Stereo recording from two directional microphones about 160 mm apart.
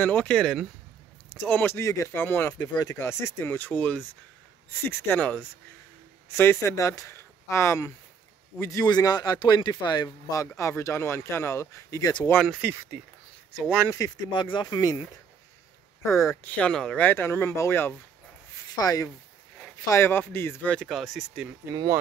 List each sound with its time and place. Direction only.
0.0 s speech: 10° left (ahead or behind); by 12.3 s 25° left (ahead or behind)
12.4 s speech: 10° right (ahead or behind)
13.7 s speech: 20° left (ahead or behind)
16.4 s speech: 5° left (ahead or behind)
21.6 s speech: 20° right (ahead or behind)